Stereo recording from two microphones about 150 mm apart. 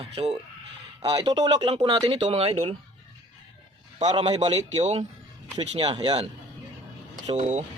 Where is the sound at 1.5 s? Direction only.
45° right (ahead or behind).